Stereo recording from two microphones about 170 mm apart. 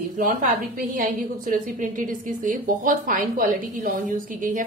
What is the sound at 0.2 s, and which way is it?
A woman's voice, 55° right (ahead or behind).